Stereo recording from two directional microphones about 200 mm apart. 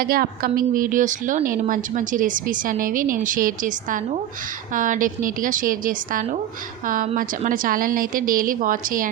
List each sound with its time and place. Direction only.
0.0 s a woman's voice: 45° right (ahead or behind)